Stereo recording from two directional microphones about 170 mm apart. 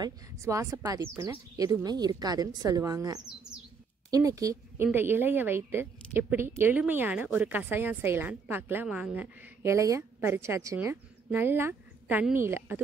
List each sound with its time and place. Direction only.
0.0 s a woman's voice: 20° right (ahead or behind)